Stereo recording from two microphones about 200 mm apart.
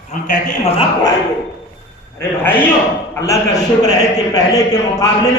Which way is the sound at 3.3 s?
20° left (ahead or behind).